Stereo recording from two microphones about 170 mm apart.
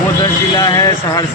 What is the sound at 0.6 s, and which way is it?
Speech, 20° left (ahead or behind).